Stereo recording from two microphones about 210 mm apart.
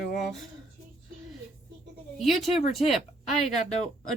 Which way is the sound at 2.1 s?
Centre (ahead or behind).